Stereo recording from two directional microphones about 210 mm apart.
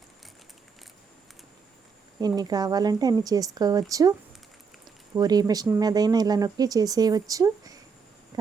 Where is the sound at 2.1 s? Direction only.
20° right (ahead or behind).